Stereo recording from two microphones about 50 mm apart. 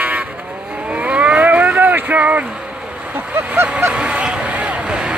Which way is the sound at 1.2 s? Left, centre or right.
Right.